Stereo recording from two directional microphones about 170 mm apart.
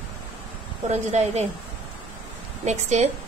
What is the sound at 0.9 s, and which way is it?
Speech, 40° right (ahead or behind).